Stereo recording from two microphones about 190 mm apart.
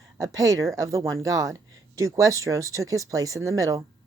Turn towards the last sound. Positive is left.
turn(degrees=-15)  # may be behind; listen again after turning